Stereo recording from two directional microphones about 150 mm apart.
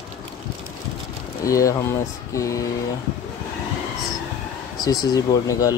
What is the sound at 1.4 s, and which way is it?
Speech, 20° left (ahead or behind).